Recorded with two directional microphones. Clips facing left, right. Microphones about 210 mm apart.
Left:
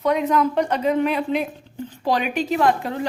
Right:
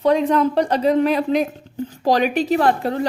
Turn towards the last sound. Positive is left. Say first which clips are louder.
# right 2 dB
turn(degrees=-35)  # may be behind; listen again after turning